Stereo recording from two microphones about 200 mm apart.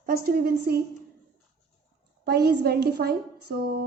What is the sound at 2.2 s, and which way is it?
Speech, 55° right (ahead or behind).